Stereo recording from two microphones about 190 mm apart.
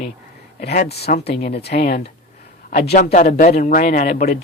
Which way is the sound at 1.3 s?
30° left (ahead or behind).